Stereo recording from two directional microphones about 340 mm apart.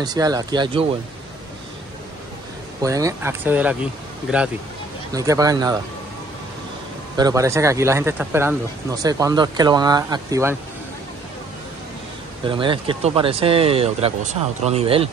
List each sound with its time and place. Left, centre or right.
0.0 s speech: centre
2.8 s speech: centre
5.1 s speech: centre
7.2 s speech: centre
12.4 s speech: centre